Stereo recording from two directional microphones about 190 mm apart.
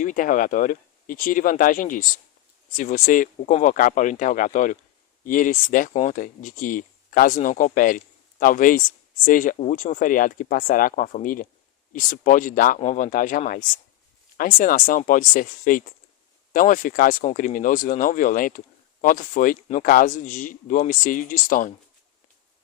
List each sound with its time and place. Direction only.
0.0 s speech: 45° left (ahead or behind)